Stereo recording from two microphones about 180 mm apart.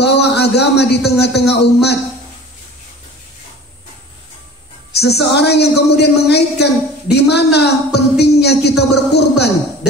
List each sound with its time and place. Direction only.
0.0 s a sound: 65° left (ahead or behind)
1.5 s a man's voice: 65° left (ahead or behind)
4.9 s a man's voice: 65° left (ahead or behind)